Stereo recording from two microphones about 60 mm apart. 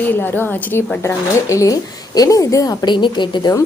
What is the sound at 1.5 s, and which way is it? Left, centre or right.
A woman's voice, left.